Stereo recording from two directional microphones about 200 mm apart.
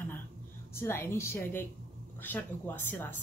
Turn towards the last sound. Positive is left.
turn(degrees=10)  # may be behind; listen again after turning